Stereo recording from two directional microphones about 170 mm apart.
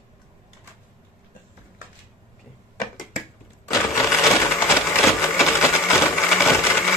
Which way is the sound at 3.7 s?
20° left (ahead or behind).